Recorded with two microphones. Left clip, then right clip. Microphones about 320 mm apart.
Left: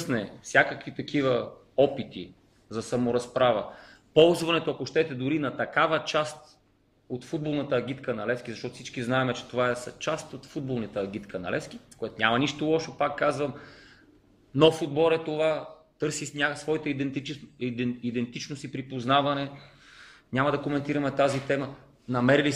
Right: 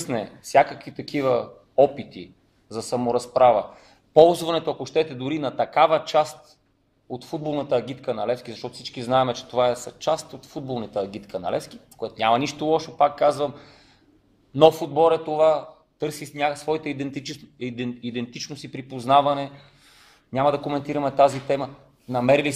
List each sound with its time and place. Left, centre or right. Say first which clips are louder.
0.4 s a man's voice: right 5 dB; centre
7.5 s a man's voice: right 5 dB; centre